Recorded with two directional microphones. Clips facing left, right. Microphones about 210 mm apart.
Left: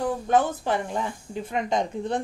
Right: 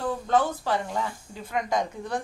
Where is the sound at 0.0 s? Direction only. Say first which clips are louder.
Left 2 dB; 20° left (ahead or behind).